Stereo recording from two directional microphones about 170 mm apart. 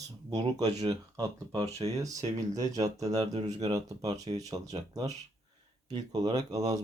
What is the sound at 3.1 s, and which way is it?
Speech, 40° right (ahead or behind).